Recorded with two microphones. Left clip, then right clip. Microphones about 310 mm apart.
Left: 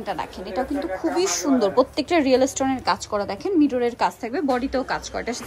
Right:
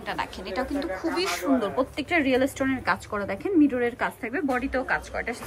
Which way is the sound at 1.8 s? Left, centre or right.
Left.